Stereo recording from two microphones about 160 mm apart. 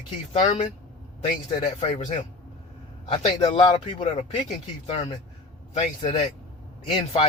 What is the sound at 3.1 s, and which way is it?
Speech, 30° left (ahead or behind).